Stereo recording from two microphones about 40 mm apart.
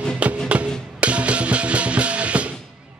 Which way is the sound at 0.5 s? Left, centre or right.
Right.